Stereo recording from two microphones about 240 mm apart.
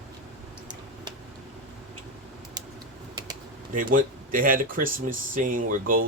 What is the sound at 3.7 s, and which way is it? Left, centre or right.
Speech, right.